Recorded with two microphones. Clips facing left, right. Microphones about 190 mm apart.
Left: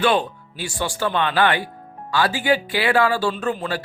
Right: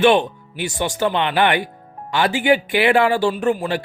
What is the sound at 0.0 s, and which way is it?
Speech, 20° right (ahead or behind).